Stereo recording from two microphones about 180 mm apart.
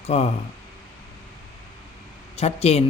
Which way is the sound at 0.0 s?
35° left (ahead or behind).